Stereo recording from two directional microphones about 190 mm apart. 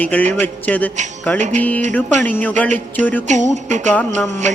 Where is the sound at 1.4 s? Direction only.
40° right (ahead or behind).